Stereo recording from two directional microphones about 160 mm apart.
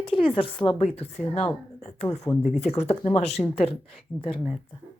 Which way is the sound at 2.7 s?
40° left (ahead or behind).